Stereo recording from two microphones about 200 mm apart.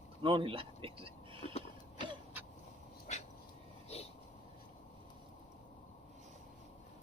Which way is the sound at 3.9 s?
30° left (ahead or behind).